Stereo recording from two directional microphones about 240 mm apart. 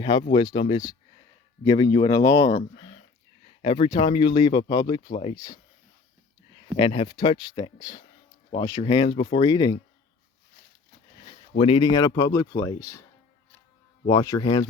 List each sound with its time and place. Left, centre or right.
0.0 s speech: centre
6.7 s speech: left
11.5 s speech: left
14.1 s speech: centre